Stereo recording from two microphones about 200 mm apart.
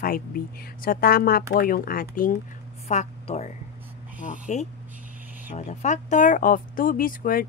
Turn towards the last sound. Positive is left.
turn(degrees=45)  # may be behind; listen again after turning